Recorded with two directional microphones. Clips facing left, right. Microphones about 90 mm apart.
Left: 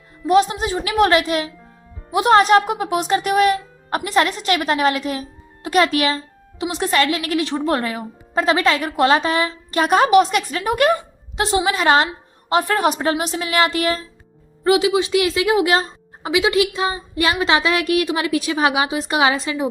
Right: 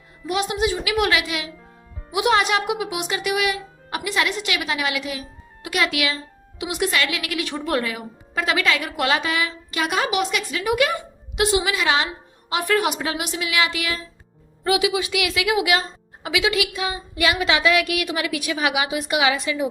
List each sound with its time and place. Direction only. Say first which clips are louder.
0.3 s a woman's voice: left 6 dB; 35° left (ahead or behind)
14.6 s speech: left 5 dB; 30° left (ahead or behind)